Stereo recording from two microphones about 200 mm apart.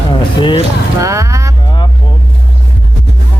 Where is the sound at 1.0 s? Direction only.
15° right (ahead or behind).